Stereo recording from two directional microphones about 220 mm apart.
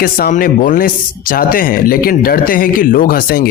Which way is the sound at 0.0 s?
40° left (ahead or behind).